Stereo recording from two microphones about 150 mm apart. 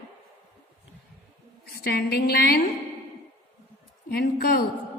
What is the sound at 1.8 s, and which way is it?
Speech, 90° left.